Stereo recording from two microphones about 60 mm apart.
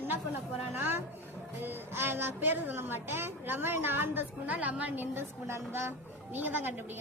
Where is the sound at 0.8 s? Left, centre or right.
Right.